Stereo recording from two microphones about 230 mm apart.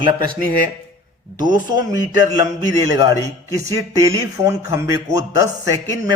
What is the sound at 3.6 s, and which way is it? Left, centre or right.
Speech, centre.